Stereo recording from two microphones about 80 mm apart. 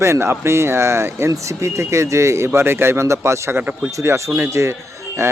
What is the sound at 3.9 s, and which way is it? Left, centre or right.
Speech, right.